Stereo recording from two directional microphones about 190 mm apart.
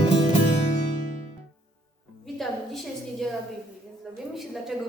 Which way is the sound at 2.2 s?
Centre (ahead or behind).